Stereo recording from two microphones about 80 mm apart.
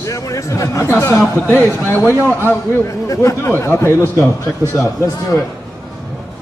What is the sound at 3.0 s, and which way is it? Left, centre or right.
A man's voice, left.